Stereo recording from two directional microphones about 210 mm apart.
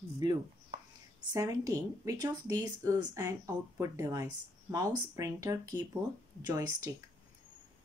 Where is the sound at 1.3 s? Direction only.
15° right (ahead or behind).